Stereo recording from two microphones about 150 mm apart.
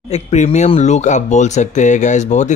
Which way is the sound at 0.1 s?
50° left (ahead or behind).